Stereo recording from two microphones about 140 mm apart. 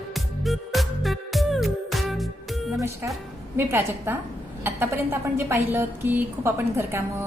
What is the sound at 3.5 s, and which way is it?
A woman's voice, 15° right (ahead or behind).